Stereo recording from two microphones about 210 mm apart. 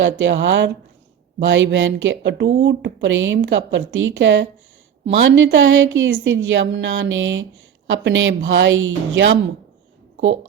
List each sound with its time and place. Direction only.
0.0 s a woman's voice: 60° right (ahead or behind)